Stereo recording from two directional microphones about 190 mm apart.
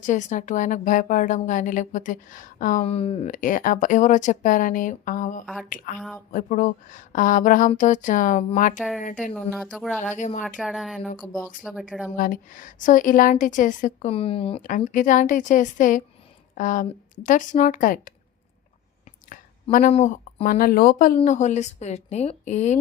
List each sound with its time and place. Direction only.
0.0 s a woman's voice: 40° left (ahead or behind)
9.3 s speech: 5° left (ahead or behind)
9.7 s speech: 5° right (ahead or behind)
10.2 s a woman's voice: 40° left (ahead or behind)
10.6 s speech: centre (ahead or behind)
12.1 s a woman's voice: 45° left (ahead or behind); by 14.6 s 30° left (ahead or behind)
14.9 s a woman's voice: 45° left (ahead or behind)
19.9 s a woman's voice: 40° left (ahead or behind)